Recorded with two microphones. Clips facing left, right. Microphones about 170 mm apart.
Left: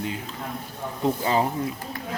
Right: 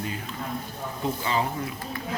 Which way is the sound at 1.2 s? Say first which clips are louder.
Left 3 dB; 35° left (ahead or behind).